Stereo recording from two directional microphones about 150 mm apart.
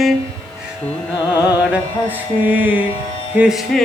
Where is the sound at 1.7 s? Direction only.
10° right (ahead or behind).